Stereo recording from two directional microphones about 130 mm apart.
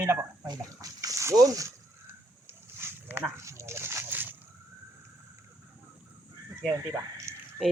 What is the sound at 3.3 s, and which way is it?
Dog, 25° right (ahead or behind).